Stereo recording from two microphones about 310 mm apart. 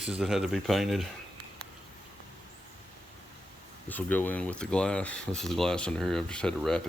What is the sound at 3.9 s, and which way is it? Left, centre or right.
Speech, centre.